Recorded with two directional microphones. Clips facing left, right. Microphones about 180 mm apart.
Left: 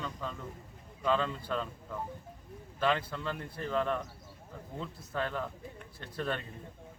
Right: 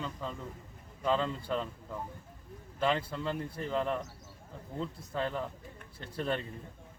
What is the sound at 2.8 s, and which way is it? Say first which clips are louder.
Speech: even; 30° right (ahead or behind).